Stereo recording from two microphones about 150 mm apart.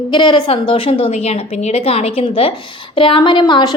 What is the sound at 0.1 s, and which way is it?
A woman's voice, 30° left (ahead or behind).